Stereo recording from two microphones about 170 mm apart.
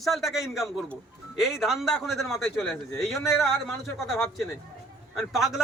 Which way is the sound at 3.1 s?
15° left (ahead or behind).